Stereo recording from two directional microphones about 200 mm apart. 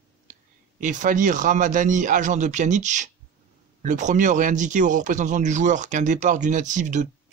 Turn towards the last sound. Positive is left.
turn(degrees=-40)  # may be behind; listen again after turning